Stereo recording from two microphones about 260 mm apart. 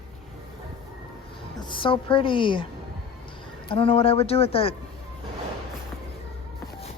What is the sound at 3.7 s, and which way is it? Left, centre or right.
A woman's voice, left.